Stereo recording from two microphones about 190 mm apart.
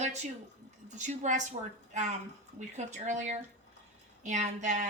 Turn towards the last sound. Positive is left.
turn(degrees=-40)  # may be behind; listen again after turning